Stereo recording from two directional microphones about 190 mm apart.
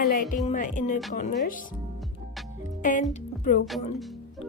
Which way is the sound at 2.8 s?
40° left (ahead or behind).